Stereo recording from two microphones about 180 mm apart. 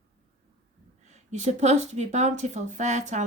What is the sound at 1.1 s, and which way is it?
A woman's voice, 40° right (ahead or behind).